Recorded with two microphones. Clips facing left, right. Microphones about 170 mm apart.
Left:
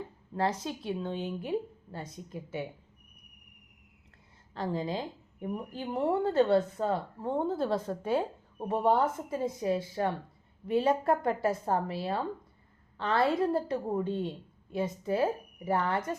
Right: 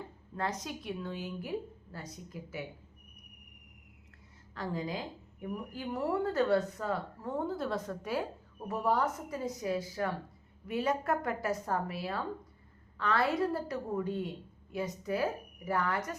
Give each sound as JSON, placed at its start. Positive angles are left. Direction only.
{"t": 0.3, "sound": "speech", "side_deg": 30}
{"t": 4.5, "sound": "speech", "side_deg": 25}